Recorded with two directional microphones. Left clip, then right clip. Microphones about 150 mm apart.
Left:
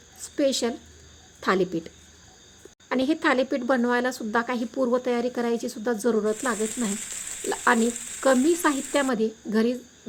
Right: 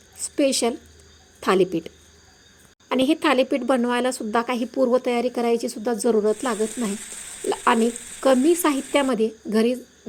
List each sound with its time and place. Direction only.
0.2 s a woman's voice: 15° right (ahead or behind)
2.9 s a woman's voice: 20° right (ahead or behind)